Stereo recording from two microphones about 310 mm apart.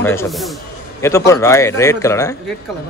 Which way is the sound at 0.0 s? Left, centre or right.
Centre.